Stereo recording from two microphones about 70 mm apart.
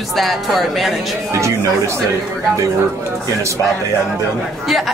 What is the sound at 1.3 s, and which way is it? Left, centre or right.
Speech, right.